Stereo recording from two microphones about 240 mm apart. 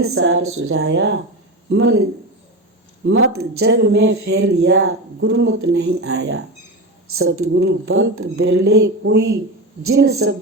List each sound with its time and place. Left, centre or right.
0.1 s speech: right
3.1 s speech: right
9.8 s a woman's voice: right